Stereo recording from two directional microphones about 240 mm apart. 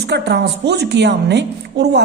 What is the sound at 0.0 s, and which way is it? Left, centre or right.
A woman's voice, right.